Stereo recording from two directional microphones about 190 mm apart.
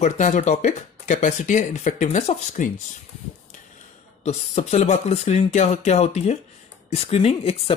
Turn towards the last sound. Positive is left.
turn(degrees=30)  # may be behind; listen again after turning